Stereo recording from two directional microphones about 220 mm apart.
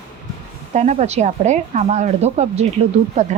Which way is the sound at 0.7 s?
30° right (ahead or behind).